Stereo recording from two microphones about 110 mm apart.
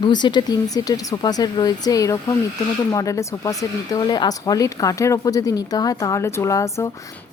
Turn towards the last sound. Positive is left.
turn(degrees=30)  # may be behind; listen again after turning